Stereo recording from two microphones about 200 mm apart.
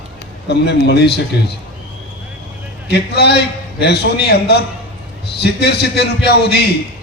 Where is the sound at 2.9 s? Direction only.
55° left (ahead or behind).